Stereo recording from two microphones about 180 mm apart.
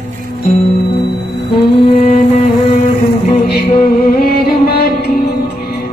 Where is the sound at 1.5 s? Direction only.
30° left (ahead or behind).